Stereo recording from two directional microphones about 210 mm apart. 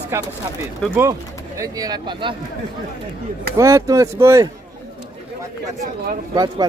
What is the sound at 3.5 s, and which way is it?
Speech, 15° right (ahead or behind).